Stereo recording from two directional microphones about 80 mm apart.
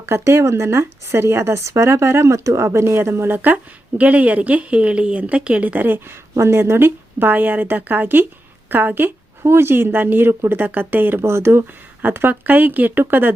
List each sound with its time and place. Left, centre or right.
0.0 s speech: right